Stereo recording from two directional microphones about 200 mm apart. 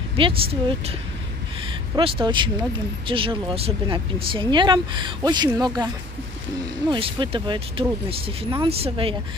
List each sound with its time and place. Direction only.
0.2 s speech: 25° right (ahead or behind)
6.9 s speech: 25° right (ahead or behind)